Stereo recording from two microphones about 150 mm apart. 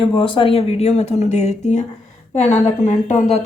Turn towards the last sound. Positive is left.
turn(degrees=50)  # may be behind; listen again after turning